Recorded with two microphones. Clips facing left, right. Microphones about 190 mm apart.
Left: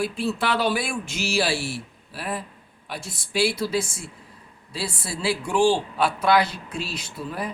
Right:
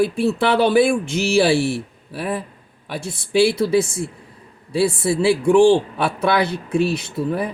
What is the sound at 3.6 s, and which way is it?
Speech, 55° right (ahead or behind).